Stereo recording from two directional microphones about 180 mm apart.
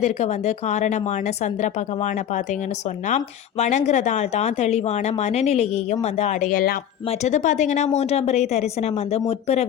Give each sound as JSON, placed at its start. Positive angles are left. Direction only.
{"t": 0.0, "sound": "speech", "side_deg": 40}
{"t": 3.6, "sound": "speech", "side_deg": 40}